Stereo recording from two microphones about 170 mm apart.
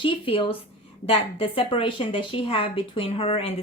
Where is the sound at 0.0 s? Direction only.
30° left (ahead or behind).